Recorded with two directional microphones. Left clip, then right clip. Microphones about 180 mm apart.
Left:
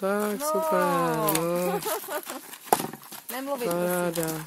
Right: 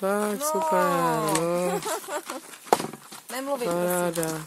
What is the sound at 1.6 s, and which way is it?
Speech, 40° right (ahead or behind).